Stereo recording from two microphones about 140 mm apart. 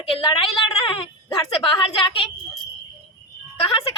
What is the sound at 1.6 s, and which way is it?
Speech, 40° left (ahead or behind).